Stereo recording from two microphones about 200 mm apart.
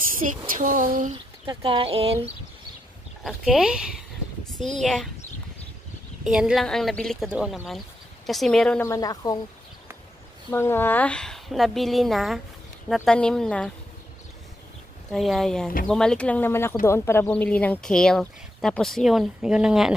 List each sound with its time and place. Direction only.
0.2 s a sound: 35° right (ahead or behind)
1.4 s speech: 25° right (ahead or behind)
3.3 s speech: 5° right (ahead or behind)
6.2 s speech: 5° right (ahead or behind)
8.8 s speech: 15° left (ahead or behind)
10.5 s speech: 10° left (ahead or behind)
15.0 s speech: centre (ahead or behind)